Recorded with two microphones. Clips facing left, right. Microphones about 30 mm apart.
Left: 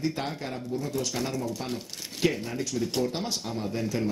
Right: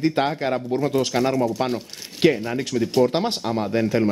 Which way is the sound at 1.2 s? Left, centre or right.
Right.